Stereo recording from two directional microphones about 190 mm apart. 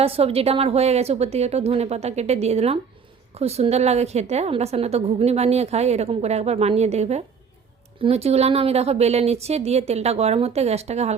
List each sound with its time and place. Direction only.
0.0 s a woman's voice: 30° right (ahead or behind)